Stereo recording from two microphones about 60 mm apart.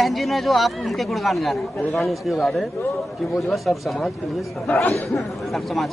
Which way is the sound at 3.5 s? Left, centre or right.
Centre.